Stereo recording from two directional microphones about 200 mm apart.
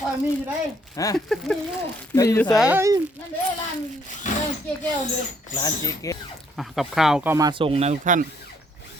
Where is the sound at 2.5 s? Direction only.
5° right (ahead or behind).